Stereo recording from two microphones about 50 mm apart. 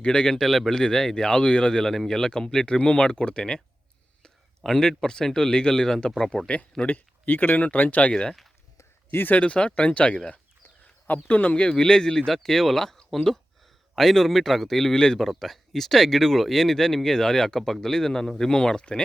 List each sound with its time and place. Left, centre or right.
0.0 s speech: centre
0.3 s a man's voice: centre
6.8 s speech: left
8.1 s a man's voice: centre; by 11.5 s left
11.5 s a man's voice: centre